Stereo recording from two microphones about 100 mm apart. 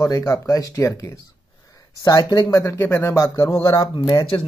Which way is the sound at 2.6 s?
30° left (ahead or behind).